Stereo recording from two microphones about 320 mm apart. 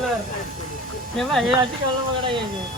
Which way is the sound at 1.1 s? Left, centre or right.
Centre.